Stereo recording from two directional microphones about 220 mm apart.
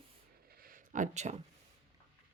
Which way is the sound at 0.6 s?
35° right (ahead or behind).